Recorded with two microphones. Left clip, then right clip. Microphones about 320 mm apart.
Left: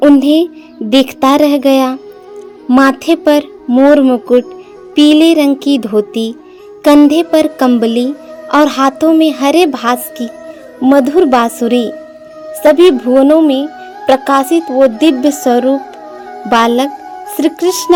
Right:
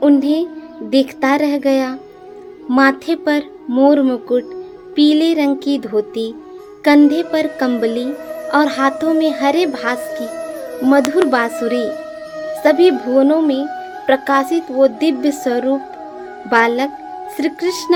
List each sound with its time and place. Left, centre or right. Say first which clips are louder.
0.2 s speech: left 7 dB; left